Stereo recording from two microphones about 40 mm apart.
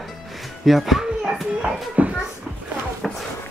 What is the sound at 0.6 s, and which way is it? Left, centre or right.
Speech, centre.